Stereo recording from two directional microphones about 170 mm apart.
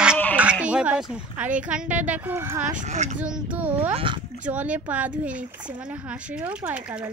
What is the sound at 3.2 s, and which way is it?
Speech, 5° right (ahead or behind).